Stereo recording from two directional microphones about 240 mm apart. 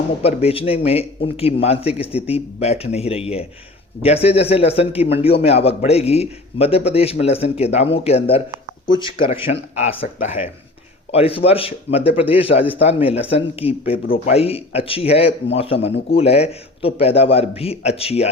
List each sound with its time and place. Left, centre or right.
0.2 s speech: left